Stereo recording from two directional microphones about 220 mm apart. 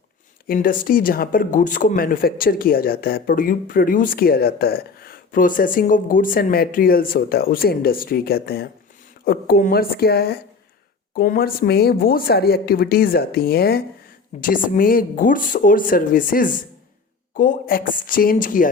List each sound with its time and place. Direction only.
0.4 s a woman's voice: 40° left (ahead or behind)